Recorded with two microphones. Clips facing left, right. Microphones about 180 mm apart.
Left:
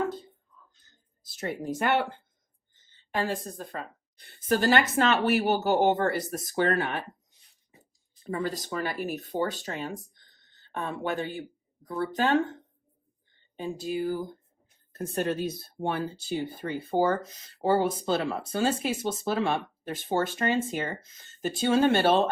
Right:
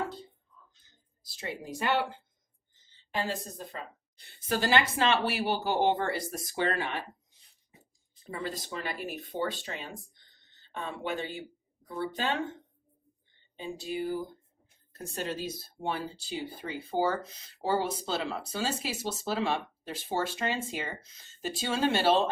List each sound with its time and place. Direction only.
1.4 s speech: 50° left (ahead or behind)
8.2 s speech: 45° left (ahead or behind)
10.2 s a sound: 50° left (ahead or behind)
11.1 s speech: 45° left (ahead or behind)
14.9 s speech: 55° left (ahead or behind)